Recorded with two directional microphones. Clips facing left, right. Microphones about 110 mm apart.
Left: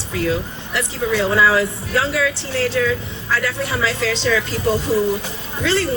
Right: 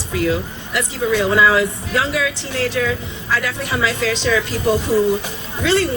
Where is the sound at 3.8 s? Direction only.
15° right (ahead or behind).